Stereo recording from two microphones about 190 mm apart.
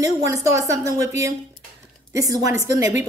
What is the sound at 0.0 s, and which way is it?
A woman's voice, 15° right (ahead or behind).